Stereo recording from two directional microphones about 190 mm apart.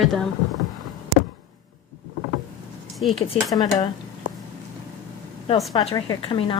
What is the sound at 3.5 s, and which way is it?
Speech, 20° left (ahead or behind).